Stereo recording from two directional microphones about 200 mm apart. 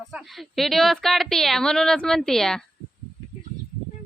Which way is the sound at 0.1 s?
Centre (ahead or behind).